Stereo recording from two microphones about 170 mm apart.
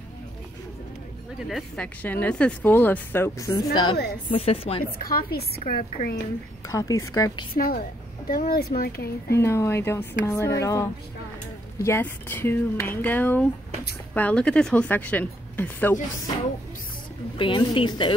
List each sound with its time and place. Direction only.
1.5 s a woman's voice: 5° left (ahead or behind); by 4.8 s 35° left (ahead or behind)
4.9 s speech: 60° left (ahead or behind)
6.7 s a woman's voice: 20° left (ahead or behind)
7.5 s speech: 55° left (ahead or behind)
9.3 s speech: 15° left (ahead or behind)
17.4 s a woman's voice: 30° left (ahead or behind)